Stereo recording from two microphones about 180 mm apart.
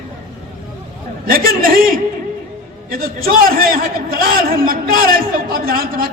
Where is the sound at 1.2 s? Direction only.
55° right (ahead or behind).